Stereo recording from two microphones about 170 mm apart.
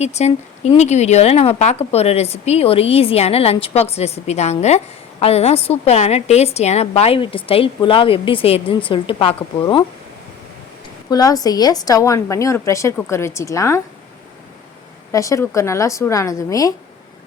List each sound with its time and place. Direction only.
0.0 s a woman's voice: 40° left (ahead or behind)
11.1 s a woman's voice: 20° left (ahead or behind)
15.1 s a woman's voice: 20° left (ahead or behind)